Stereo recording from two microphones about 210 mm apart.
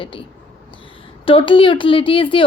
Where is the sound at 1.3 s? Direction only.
25° left (ahead or behind).